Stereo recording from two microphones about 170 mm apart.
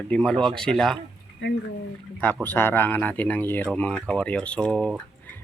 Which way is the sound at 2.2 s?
10° left (ahead or behind).